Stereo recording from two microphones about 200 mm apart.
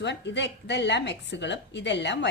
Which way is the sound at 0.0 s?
60° left (ahead or behind).